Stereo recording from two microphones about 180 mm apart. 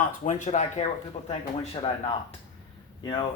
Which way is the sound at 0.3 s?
40° left (ahead or behind).